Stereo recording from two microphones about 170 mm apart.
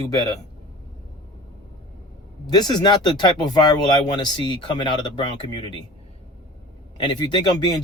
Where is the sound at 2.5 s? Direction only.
25° left (ahead or behind).